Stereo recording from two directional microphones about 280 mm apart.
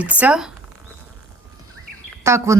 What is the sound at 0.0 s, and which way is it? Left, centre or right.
Speech, centre.